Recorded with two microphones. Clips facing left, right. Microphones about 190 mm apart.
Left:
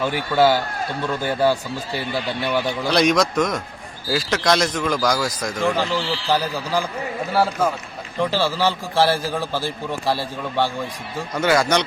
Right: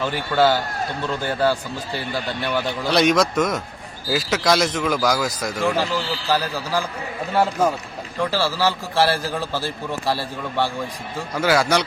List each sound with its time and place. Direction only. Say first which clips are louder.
0.0 s a man's voice: left 1 dB; 10° left (ahead or behind)
2.8 s speech: right 1 dB; centre (ahead or behind)
6.3 s a man's voice: left 1 dB; 15° left (ahead or behind)
8.2 s a man's voice: left 1 dB; 15° left (ahead or behind)
11.3 s speech: even; 5° right (ahead or behind)